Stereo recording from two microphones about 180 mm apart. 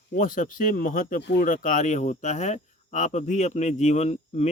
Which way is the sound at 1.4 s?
50° left (ahead or behind).